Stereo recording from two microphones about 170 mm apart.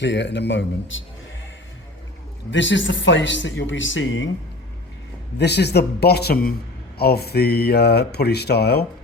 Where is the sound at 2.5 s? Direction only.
90° left.